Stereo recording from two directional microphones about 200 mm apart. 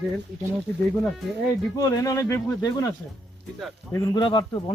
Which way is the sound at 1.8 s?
15° left (ahead or behind).